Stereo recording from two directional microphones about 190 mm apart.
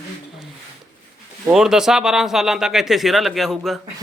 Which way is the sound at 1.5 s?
5° right (ahead or behind).